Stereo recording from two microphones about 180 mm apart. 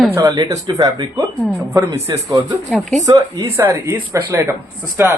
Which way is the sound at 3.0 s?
20° right (ahead or behind).